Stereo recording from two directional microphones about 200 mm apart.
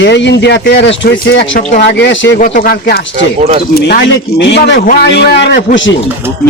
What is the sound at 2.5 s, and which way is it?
A man's voice, 50° left (ahead or behind).